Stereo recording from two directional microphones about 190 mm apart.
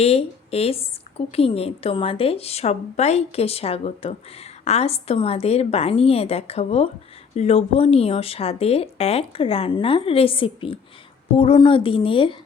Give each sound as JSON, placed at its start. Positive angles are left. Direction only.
{"t": 0.0, "sound": "a woman's voice", "side_deg": 30}